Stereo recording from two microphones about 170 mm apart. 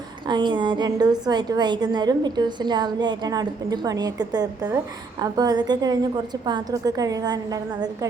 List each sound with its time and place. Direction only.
0.3 s a woman's voice: 25° right (ahead or behind)